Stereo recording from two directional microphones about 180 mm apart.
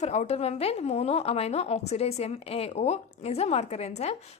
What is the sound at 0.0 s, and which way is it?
A woman's voice, 40° left (ahead or behind).